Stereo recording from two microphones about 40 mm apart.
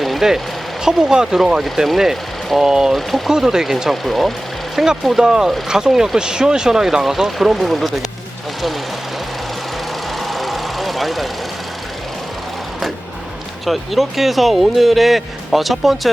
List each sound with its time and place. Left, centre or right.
0.0 s vehicle: centre
0.9 s speech: centre
3.3 s speech: centre
4.0 s speech: centre
4.8 s speech: centre
10.2 s vehicle: centre
13.7 s speech: centre